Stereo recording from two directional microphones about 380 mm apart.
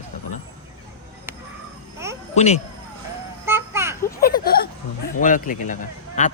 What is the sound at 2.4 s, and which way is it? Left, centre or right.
Speech, centre.